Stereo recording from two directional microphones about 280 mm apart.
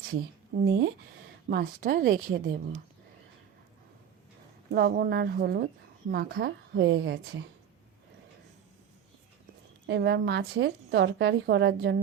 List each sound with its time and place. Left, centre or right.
0.6 s a woman's voice: right
4.7 s a woman's voice: right
9.8 s a woman's voice: right